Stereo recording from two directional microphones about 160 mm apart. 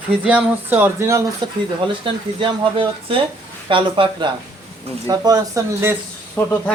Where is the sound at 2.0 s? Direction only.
30° right (ahead or behind).